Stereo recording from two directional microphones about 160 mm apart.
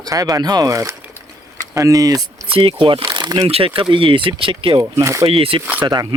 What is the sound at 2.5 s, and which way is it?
Speech, 35° right (ahead or behind).